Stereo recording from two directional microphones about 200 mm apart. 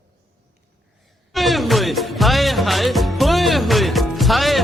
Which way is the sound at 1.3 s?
Centre (ahead or behind).